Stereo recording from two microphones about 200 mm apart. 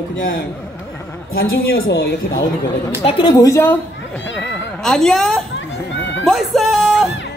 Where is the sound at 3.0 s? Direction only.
25° left (ahead or behind); by 5.4 s centre (ahead or behind).